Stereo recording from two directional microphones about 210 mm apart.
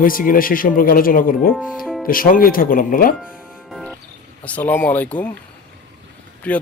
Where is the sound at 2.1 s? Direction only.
40° left (ahead or behind).